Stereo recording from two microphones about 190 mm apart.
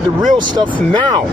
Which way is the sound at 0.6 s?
25° right (ahead or behind).